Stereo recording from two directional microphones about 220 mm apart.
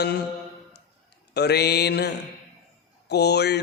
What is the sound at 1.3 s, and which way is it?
A man's voice, 50° left (ahead or behind).